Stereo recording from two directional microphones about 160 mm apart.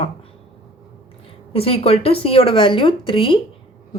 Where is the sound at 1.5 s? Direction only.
35° left (ahead or behind).